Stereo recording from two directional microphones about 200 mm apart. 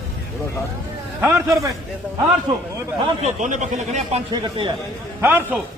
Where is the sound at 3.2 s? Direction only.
35° right (ahead or behind).